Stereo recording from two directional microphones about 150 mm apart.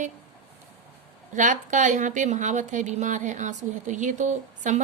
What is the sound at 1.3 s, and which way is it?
Speech, 55° right (ahead or behind).